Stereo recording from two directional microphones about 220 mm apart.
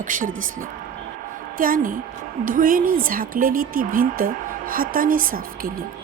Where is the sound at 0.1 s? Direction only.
35° right (ahead or behind).